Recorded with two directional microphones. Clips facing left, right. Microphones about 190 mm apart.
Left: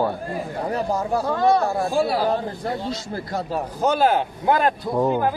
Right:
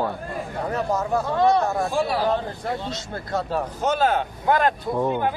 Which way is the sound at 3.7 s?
35° left (ahead or behind).